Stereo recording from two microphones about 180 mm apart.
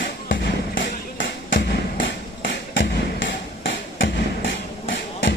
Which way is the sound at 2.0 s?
90° left.